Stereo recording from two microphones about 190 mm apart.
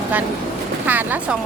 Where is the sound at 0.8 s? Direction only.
10° right (ahead or behind).